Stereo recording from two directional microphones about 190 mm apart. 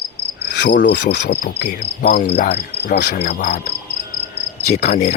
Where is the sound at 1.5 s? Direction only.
60° left (ahead or behind).